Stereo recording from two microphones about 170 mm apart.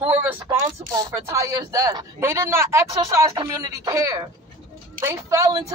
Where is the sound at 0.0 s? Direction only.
10° right (ahead or behind).